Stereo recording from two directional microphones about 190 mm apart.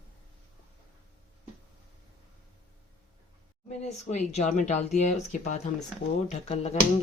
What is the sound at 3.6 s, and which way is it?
Speech, 35° left (ahead or behind).